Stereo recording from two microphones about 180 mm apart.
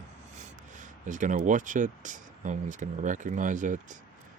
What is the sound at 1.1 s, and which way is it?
Speech, 45° right (ahead or behind).